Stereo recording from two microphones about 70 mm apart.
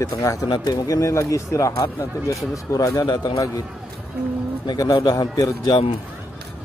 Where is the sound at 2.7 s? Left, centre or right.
Left.